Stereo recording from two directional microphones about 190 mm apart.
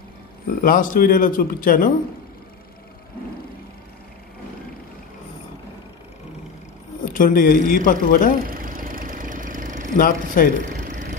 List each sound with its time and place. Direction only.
0.6 s speech: 45° left (ahead or behind)
7.1 s speech: 45° left (ahead or behind)
8.4 s vehicle: 50° right (ahead or behind)
9.9 s speech: 45° left (ahead or behind)
10.6 s a sound: 40° right (ahead or behind)